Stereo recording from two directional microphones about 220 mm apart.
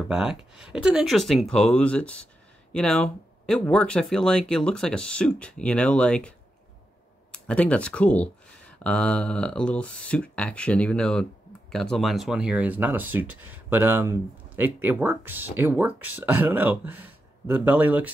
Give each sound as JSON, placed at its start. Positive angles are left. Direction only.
{"t": 0.1, "sound": "speech", "side_deg": -5}
{"t": 7.3, "sound": "speech", "side_deg": 5}